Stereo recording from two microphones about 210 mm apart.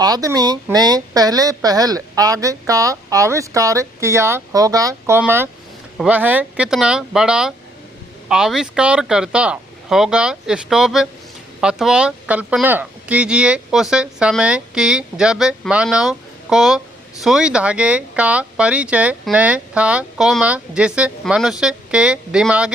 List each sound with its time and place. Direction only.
0.0 s a woman's voice: 15° right (ahead or behind)